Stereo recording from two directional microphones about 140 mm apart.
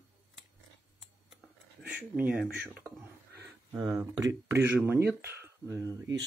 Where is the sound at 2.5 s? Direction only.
10° right (ahead or behind).